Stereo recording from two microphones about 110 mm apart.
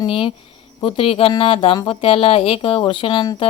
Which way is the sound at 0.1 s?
55° left (ahead or behind).